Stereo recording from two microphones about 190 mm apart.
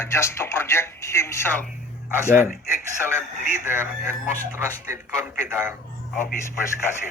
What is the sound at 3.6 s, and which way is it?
Speech, 10° right (ahead or behind).